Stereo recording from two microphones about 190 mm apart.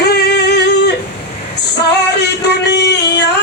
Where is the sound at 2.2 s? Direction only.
60° left (ahead or behind).